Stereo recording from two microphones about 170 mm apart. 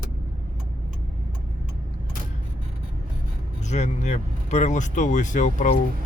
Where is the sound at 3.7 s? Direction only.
40° left (ahead or behind).